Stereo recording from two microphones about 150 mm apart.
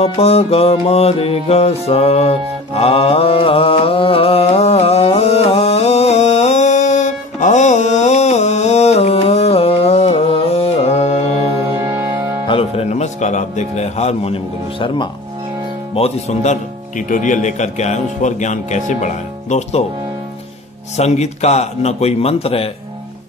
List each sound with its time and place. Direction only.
0.0 s music: 45° left (ahead or behind)
11.8 s music: 20° right (ahead or behind)
12.4 s music: 40° left (ahead or behind)
15.9 s speech: 45° left (ahead or behind)
20.9 s speech: 50° left (ahead or behind)